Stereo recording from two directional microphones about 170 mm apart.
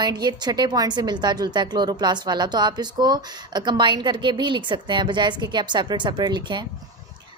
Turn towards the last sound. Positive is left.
turn(degrees=-25)  # may be behind; listen again after turning